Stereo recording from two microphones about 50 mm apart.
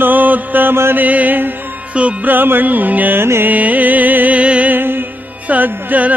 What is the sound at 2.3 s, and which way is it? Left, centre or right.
Mantra, right.